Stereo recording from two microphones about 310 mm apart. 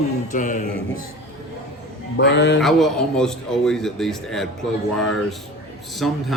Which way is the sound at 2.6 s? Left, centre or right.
Centre.